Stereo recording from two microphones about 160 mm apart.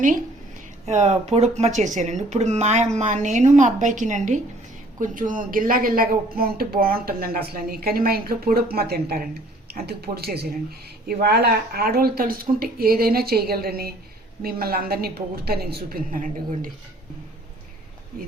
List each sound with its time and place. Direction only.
0.9 s speech: 45° right (ahead or behind)